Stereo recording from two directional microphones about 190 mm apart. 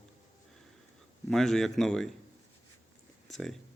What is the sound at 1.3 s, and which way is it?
Speech, centre (ahead or behind).